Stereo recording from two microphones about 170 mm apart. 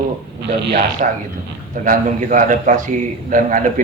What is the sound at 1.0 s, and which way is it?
A man's voice, 50° right (ahead or behind).